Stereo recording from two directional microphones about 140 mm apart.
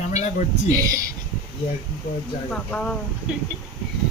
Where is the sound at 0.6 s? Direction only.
25° right (ahead or behind).